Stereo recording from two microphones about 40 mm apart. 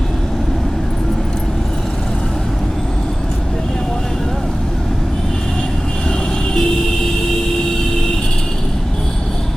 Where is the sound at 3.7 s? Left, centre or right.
Centre.